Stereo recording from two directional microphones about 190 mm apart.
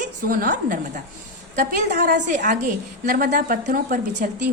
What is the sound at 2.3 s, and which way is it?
A woman's voice, 40° right (ahead or behind).